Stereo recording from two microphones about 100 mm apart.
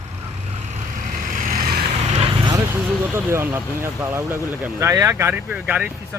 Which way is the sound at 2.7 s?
25° right (ahead or behind).